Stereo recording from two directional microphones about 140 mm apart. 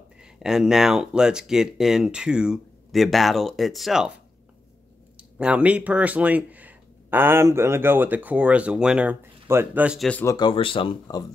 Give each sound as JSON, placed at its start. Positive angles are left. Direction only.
{"t": 0.2, "sound": "speech", "side_deg": -5}
{"t": 5.4, "sound": "speech", "side_deg": -10}
{"t": 9.9, "sound": "speech", "side_deg": 5}
{"t": 10.2, "sound": "speech", "side_deg": 30}